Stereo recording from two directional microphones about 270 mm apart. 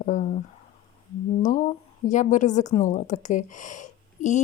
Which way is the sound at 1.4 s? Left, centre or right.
Left.